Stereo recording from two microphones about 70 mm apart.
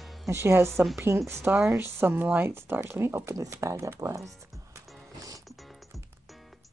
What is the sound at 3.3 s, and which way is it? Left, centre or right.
Speech, right.